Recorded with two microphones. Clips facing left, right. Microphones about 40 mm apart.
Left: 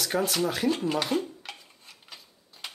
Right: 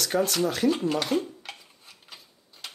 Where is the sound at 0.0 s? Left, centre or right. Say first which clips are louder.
Right 2 dB; centre.